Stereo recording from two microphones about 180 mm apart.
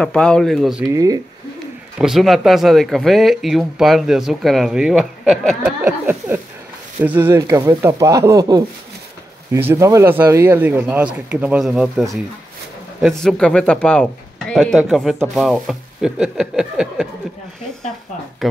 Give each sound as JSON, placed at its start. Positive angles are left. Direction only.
{"t": 0.0, "sound": "speech", "side_deg": 5}
{"t": 0.8, "sound": "speech", "side_deg": -20}
{"t": 2.0, "sound": "speech", "side_deg": 0}
{"t": 5.8, "sound": "speech", "side_deg": -10}
{"t": 18.4, "sound": "speech", "side_deg": 0}